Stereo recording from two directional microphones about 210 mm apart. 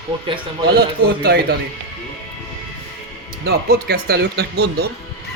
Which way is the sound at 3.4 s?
50° right (ahead or behind).